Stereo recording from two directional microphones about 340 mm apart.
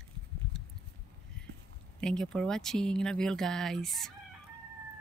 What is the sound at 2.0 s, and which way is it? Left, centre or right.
Speech, centre.